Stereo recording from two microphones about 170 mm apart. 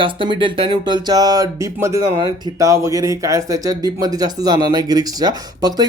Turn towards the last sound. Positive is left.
turn(degrees=-25)  # may be behind; listen again after turning